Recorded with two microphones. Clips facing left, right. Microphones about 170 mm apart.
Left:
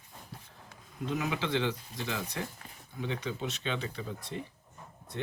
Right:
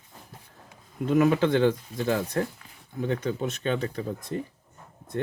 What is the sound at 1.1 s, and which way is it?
Speech, 50° right (ahead or behind).